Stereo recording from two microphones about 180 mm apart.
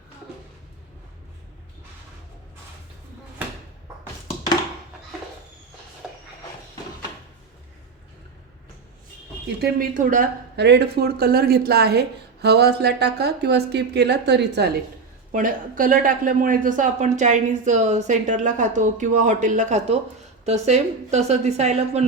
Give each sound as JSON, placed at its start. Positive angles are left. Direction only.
{"t": 6.0, "sound": "a sound", "side_deg": -5}
{"t": 9.6, "sound": "a man's voice", "side_deg": -50}
{"t": 10.6, "sound": "a woman's voice", "side_deg": -70}
{"t": 15.3, "sound": "a man's voice", "side_deg": -45}